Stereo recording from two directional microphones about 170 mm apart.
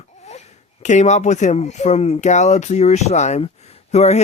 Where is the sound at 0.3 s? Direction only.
45° left (ahead or behind).